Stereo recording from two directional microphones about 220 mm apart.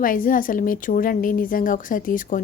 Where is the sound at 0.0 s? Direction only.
40° left (ahead or behind).